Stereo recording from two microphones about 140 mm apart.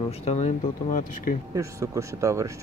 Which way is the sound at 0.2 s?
50° left (ahead or behind).